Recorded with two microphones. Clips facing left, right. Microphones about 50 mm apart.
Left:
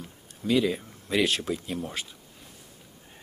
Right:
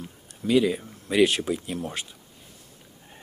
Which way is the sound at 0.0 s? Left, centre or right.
Centre.